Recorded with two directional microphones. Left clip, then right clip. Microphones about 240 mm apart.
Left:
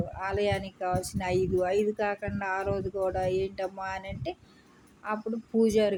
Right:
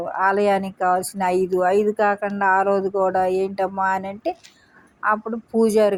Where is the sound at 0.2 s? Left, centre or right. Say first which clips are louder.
Right 11 dB; centre.